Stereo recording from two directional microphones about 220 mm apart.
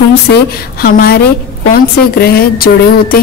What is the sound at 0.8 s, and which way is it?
A woman's voice, 45° left (ahead or behind).